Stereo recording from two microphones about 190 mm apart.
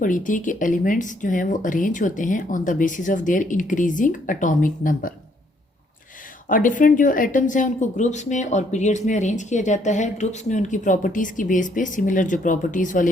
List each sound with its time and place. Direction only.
0.0 s speech: 45° left (ahead or behind)
6.5 s speech: 45° left (ahead or behind)